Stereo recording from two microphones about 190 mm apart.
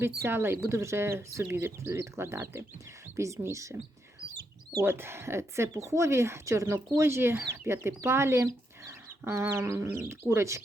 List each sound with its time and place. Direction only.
0.2 s speech: 10° right (ahead or behind)
4.8 s speech: 15° right (ahead or behind)